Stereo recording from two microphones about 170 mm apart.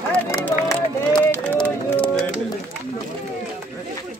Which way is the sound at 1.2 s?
10° left (ahead or behind).